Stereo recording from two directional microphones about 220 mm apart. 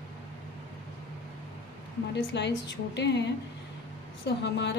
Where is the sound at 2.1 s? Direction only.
55° left (ahead or behind).